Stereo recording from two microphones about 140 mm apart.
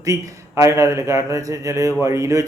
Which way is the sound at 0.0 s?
20° right (ahead or behind).